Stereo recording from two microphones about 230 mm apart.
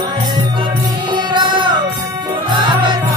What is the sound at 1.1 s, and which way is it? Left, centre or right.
Music, centre.